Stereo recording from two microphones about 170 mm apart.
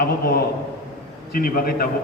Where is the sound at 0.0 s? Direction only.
60° left (ahead or behind).